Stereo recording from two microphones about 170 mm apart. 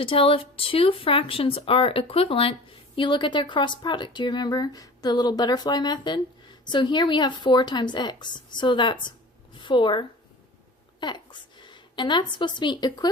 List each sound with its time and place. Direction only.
0.0 s a woman's voice: 30° left (ahead or behind)